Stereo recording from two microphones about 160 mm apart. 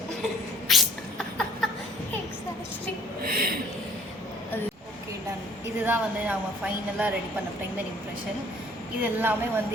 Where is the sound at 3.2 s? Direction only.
65° right (ahead or behind).